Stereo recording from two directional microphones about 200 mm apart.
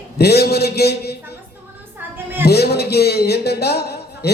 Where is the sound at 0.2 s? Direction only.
55° left (ahead or behind).